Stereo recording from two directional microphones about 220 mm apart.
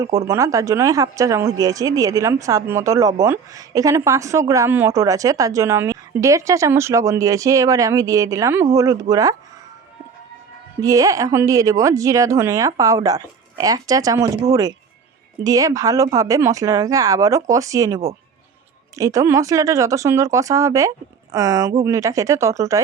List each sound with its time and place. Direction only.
0.3 s speech: 15° right (ahead or behind)
10.8 s speech: 15° right (ahead or behind)